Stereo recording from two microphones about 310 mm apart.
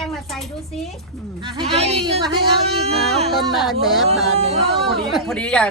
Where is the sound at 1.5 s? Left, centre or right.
Centre.